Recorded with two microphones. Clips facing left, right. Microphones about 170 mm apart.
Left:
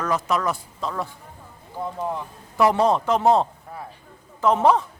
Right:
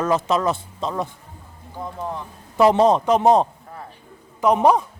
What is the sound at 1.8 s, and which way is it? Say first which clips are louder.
Speech: left 2 dB; 5° left (ahead or behind).